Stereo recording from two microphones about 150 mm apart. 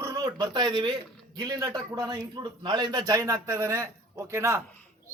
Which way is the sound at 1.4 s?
25° right (ahead or behind).